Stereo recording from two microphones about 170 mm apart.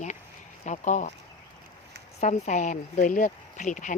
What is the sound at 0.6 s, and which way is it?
Speech, 45° left (ahead or behind).